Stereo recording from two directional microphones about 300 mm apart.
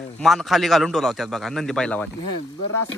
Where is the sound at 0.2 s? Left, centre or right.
Centre.